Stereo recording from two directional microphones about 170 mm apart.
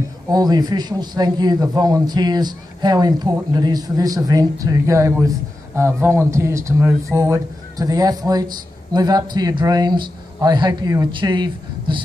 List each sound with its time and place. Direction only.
0.3 s speech: 25° right (ahead or behind)